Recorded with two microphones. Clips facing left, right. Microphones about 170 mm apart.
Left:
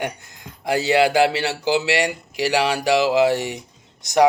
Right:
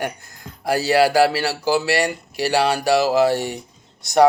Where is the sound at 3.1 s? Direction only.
15° left (ahead or behind).